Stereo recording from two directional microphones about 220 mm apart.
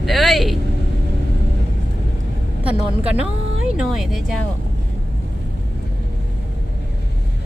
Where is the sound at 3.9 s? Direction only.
Centre (ahead or behind).